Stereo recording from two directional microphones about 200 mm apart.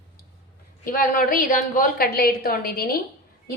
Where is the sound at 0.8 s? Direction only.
45° left (ahead or behind).